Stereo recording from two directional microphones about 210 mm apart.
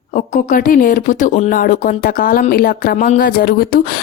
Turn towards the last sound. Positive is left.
turn(degrees=45)  # may be behind; listen again after turning